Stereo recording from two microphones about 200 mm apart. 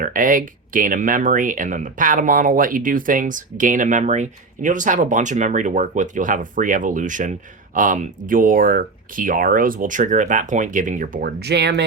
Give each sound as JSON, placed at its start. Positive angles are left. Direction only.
{"t": 0.0, "sound": "speech", "side_deg": -45}